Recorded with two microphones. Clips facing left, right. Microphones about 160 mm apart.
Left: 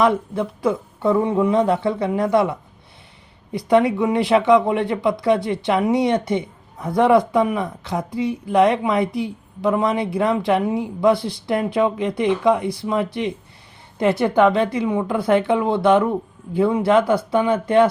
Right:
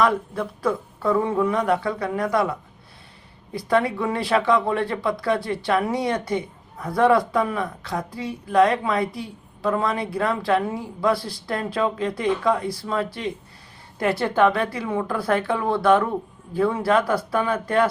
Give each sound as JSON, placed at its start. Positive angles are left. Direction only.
{"t": 0.0, "sound": "speech", "side_deg": 20}